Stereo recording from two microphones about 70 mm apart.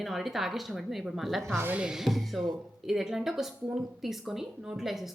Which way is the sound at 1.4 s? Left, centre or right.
Right.